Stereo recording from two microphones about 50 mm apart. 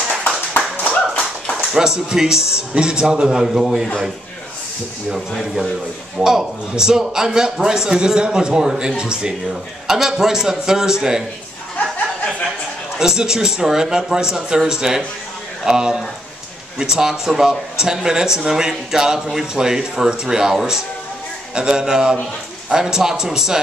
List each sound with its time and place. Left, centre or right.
1.8 s speech: centre
5.1 s speech: centre
12.9 s speech: centre